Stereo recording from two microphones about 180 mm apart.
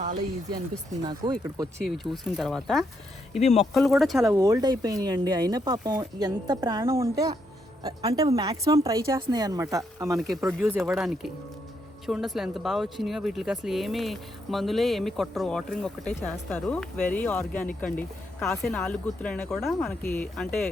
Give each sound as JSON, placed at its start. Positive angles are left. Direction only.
{"t": 1.0, "sound": "speech", "side_deg": -25}
{"t": 1.8, "sound": "speech", "side_deg": 0}
{"t": 3.4, "sound": "speech", "side_deg": 35}
{"t": 3.8, "sound": "speech", "side_deg": 0}
{"t": 4.2, "sound": "speech", "side_deg": -15}
{"t": 10.2, "sound": "speech", "side_deg": 0}
{"t": 10.4, "sound": "speech", "side_deg": -10}
{"t": 18.6, "sound": "speech", "side_deg": 0}
{"t": 20.0, "sound": "speech", "side_deg": 10}